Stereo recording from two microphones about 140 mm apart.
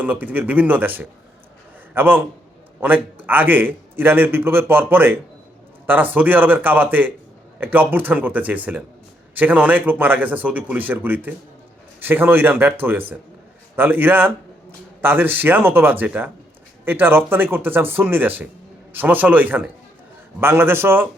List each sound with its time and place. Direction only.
0.0 s a man's voice: 10° right (ahead or behind)